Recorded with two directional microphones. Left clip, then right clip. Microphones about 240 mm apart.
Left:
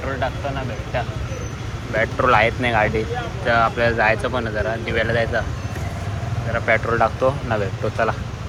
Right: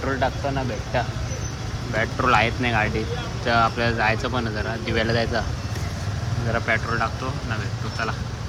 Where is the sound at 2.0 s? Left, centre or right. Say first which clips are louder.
Left 4 dB; centre.